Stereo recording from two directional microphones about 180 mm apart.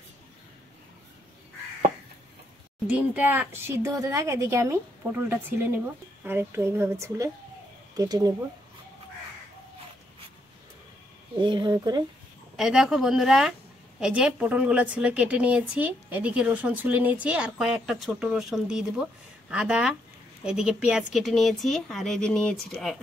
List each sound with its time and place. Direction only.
2.9 s a woman's voice: 10° right (ahead or behind)
11.3 s speech: 25° right (ahead or behind)
12.5 s a woman's voice: centre (ahead or behind)